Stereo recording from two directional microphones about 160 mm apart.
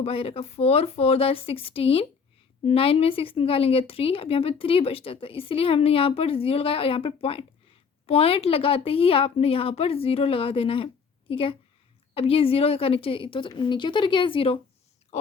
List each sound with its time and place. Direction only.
0.0 s speech: 35° left (ahead or behind)